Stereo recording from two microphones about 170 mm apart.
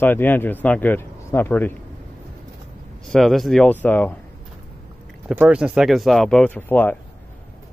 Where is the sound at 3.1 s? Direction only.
Centre (ahead or behind).